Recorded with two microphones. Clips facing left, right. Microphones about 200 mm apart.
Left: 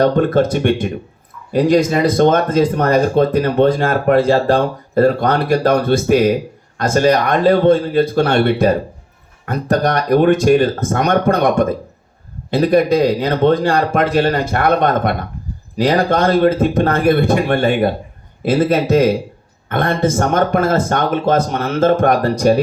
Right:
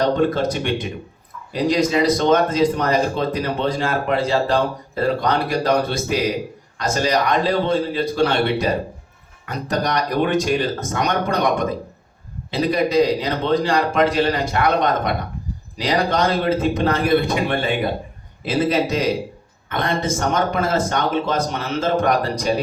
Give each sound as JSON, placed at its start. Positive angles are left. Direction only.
{"t": 0.0, "sound": "speech", "side_deg": 55}